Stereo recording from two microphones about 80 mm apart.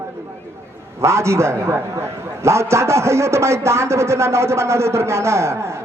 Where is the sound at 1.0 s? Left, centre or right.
Right.